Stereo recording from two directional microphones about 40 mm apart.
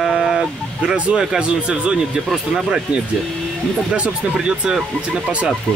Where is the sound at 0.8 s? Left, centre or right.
Right.